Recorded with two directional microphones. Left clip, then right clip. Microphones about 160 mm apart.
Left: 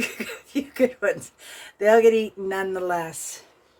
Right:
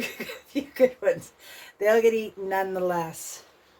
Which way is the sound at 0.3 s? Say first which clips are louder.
Left 2 dB; 30° left (ahead or behind).